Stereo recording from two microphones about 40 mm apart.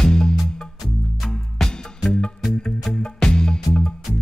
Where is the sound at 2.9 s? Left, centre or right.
Centre.